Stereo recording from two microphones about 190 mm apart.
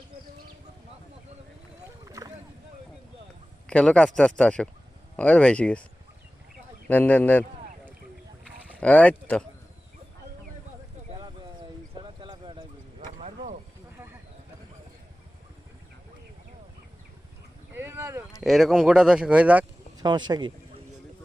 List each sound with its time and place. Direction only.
2.0 s rowboat: 15° right (ahead or behind)
3.7 s speech: 5° left (ahead or behind)
6.8 s speech: 10° left (ahead or behind)
8.6 s speech: 5° left (ahead or behind)
12.0 s clip-clop: 25° right (ahead or behind)
17.7 s a sound: 15° right (ahead or behind)
18.3 s speech: centre (ahead or behind)
20.0 s speech: 25° right (ahead or behind)